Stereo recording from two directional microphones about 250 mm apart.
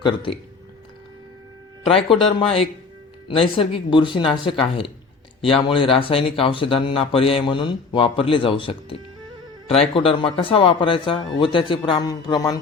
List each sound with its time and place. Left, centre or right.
0.0 s speech: centre
1.9 s a man's voice: left